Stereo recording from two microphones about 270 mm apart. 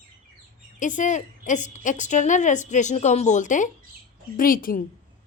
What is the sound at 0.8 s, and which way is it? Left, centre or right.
A woman's voice, left.